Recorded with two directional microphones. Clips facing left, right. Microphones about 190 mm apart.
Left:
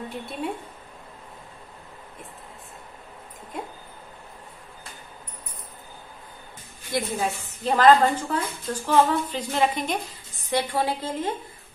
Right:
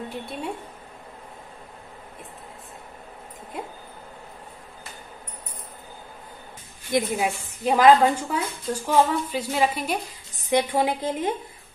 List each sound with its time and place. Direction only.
0.1 s a woman's voice: centre (ahead or behind)
6.9 s a woman's voice: 10° right (ahead or behind)
10.5 s a woman's voice: 15° right (ahead or behind)